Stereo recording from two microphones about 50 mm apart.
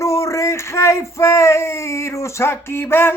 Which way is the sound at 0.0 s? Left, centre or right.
Left.